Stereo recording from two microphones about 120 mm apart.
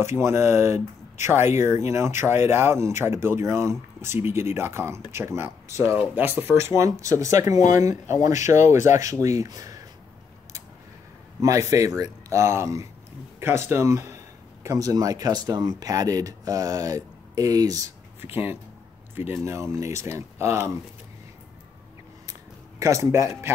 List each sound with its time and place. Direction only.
0.0 s speech: 20° right (ahead or behind)
8.5 s speech: 90° left
9.2 s speech: 25° right (ahead or behind)
11.4 s speech: 25° right (ahead or behind)
18.2 s speech: 15° right (ahead or behind)
22.8 s speech: 25° right (ahead or behind)